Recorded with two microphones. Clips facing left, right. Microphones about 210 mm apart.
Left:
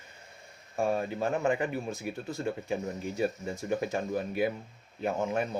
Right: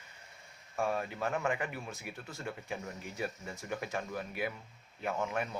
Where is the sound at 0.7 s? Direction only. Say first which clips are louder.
Left 5 dB; 30° left (ahead or behind).